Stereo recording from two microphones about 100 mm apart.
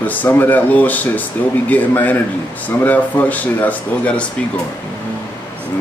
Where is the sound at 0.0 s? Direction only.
15° left (ahead or behind).